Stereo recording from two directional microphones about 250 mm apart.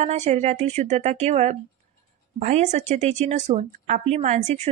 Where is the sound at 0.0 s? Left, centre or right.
Right.